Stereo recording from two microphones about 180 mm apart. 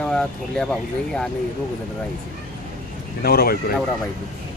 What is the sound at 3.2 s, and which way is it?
Speech, 60° left (ahead or behind).